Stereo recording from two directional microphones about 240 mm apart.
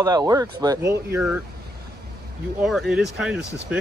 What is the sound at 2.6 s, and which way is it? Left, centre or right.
Speech, centre.